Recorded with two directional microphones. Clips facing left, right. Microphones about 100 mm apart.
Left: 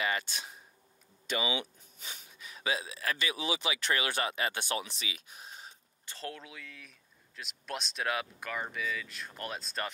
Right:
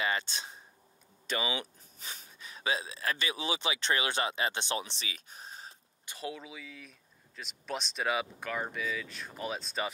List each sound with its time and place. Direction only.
0.0 s a sound: 30° right (ahead or behind)
1.2 s speech: 40° right (ahead or behind)
6.0 s speech: 10° right (ahead or behind)